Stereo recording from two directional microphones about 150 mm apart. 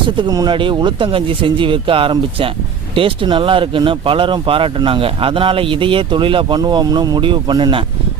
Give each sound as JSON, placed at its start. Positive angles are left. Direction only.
{"t": 0.2, "sound": "speech", "side_deg": -25}